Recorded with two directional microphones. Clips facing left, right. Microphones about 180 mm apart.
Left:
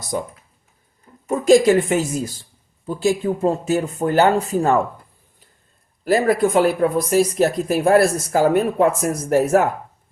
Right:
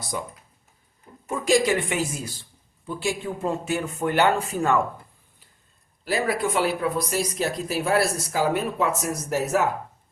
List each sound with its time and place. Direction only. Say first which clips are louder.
0.1 s speech: left 7 dB; 45° left (ahead or behind)
1.3 s speech: left 8 dB; 45° left (ahead or behind)
6.1 s speech: left 8 dB; 50° left (ahead or behind)